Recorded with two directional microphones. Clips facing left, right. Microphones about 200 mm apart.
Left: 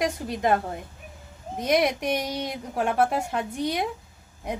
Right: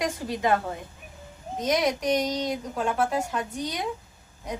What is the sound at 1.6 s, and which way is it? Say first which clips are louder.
A woman's voice: left 1 dB; 60° left (ahead or behind).